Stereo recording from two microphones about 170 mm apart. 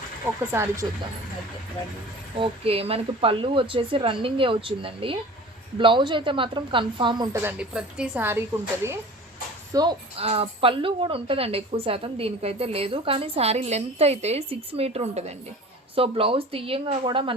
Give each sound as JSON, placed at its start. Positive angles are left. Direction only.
{"t": 0.5, "sound": "speech", "side_deg": -15}
{"t": 2.4, "sound": "a woman's voice", "side_deg": -35}
{"t": 7.4, "sound": "a woman's voice", "side_deg": -5}
{"t": 9.7, "sound": "a woman's voice", "side_deg": -20}
{"t": 10.2, "sound": "a woman's voice", "side_deg": -35}